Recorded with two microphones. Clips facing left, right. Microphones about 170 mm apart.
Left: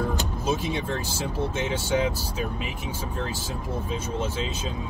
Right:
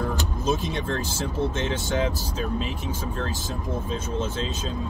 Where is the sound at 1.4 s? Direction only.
10° left (ahead or behind).